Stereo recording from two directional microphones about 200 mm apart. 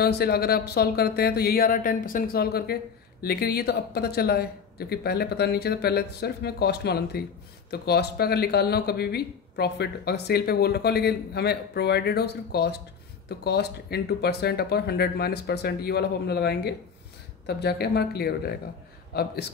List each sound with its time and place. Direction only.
0.0 s speech: 50° left (ahead or behind)